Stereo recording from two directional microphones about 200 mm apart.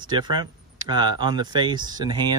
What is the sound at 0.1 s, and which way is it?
Speech, 20° right (ahead or behind).